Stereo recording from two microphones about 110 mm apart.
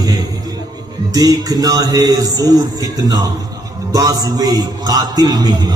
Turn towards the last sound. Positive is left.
turn(degrees=-40)  # may be behind; listen again after turning